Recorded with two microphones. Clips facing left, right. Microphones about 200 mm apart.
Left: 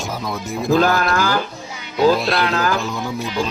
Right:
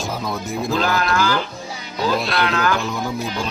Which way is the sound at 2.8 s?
Centre (ahead or behind).